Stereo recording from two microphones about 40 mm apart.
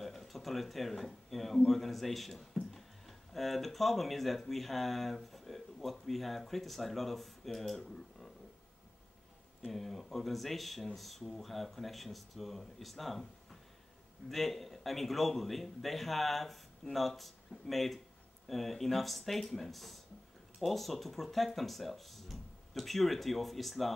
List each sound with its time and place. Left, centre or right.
0.0 s speech: centre
9.7 s speech: centre
14.3 s speech: centre